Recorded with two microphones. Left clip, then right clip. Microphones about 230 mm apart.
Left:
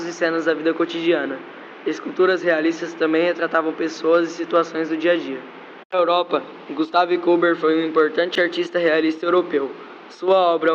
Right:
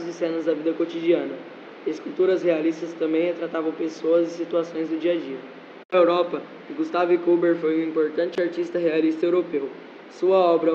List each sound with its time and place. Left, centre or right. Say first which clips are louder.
0.0 s a man's voice: left 5 dB; centre